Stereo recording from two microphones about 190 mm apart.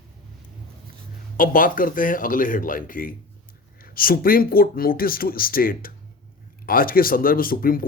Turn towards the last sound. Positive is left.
turn(degrees=50)  # may be behind; listen again after turning